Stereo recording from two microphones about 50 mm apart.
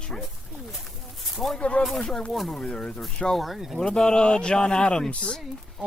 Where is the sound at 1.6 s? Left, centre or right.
Left.